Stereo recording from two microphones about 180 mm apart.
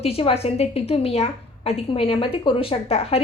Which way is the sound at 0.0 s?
35° left (ahead or behind).